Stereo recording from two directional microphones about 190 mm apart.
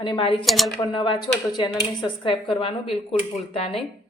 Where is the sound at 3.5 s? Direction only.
30° left (ahead or behind).